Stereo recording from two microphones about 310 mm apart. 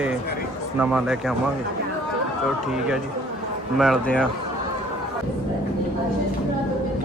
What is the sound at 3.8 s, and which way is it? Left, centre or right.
Speech, centre.